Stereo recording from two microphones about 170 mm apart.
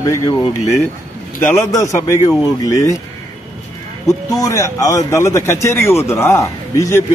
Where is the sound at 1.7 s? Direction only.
20° left (ahead or behind).